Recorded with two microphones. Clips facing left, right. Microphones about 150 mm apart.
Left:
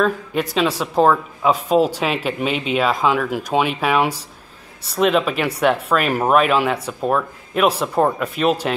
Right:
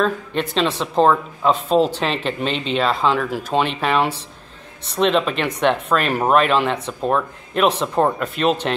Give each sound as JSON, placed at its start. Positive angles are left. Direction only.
{"t": 0.0, "sound": "speech", "side_deg": 5}